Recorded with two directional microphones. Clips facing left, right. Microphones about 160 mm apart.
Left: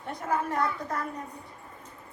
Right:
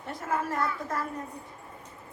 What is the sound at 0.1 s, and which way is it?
Speech, centre (ahead or behind).